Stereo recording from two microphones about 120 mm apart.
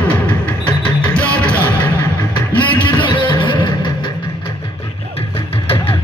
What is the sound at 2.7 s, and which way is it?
Music, 45° left (ahead or behind).